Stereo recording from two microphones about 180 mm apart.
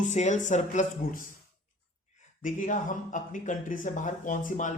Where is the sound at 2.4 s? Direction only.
45° left (ahead or behind).